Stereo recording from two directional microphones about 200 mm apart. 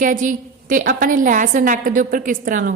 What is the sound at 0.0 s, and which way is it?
A woman's voice, 40° right (ahead or behind).